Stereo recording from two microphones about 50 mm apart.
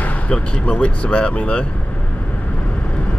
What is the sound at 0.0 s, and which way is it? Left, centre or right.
Speech, left.